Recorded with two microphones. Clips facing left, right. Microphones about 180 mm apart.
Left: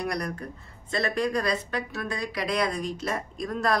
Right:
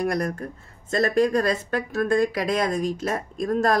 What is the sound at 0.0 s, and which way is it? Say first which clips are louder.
Speech: right 6 dB; 45° right (ahead or behind).